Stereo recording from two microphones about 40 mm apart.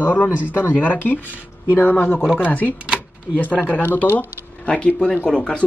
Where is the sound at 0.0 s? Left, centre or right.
Left.